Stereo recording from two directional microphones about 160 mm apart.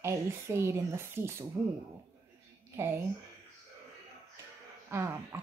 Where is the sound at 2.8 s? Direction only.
15° right (ahead or behind).